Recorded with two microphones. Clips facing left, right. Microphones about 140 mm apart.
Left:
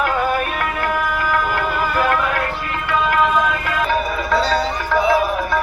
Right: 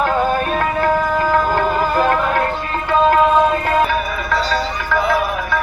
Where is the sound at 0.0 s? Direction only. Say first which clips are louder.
Right 2 dB; 30° right (ahead or behind).